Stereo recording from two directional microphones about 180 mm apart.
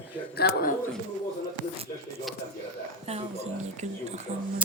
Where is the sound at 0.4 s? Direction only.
65° left (ahead or behind).